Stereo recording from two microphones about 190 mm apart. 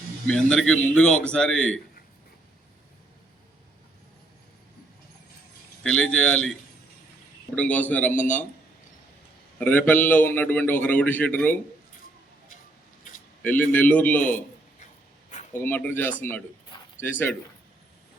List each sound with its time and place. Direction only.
0.3 s a man's voice: 5° left (ahead or behind)
5.8 s a man's voice: 5° left (ahead or behind)
8.1 s speech: 40° left (ahead or behind)
9.6 s a man's voice: 10° left (ahead or behind)
13.4 s a man's voice: 10° left (ahead or behind)
15.5 s a man's voice: 10° left (ahead or behind)